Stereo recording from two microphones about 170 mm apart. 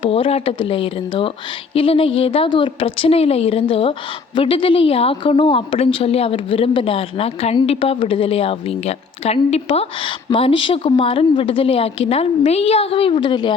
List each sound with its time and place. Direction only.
0.0 s a woman's voice: 35° left (ahead or behind)